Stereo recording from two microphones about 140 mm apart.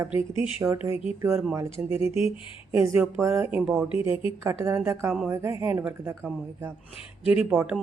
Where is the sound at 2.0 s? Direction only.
45° left (ahead or behind).